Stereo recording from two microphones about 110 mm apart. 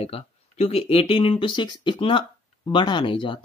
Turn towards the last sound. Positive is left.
turn(degrees=50)  # may be behind; listen again after turning